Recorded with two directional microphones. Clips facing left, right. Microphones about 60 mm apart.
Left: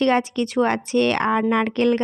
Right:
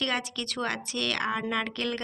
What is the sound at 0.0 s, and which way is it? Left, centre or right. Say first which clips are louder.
A woman's voice: left 12 dB; left.